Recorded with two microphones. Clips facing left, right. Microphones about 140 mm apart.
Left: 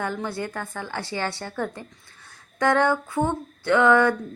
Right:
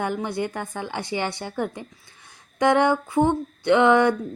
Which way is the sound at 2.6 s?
15° right (ahead or behind).